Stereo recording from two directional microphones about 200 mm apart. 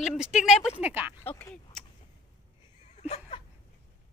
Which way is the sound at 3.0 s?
35° left (ahead or behind).